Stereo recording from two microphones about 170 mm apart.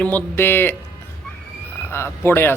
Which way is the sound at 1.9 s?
15° left (ahead or behind).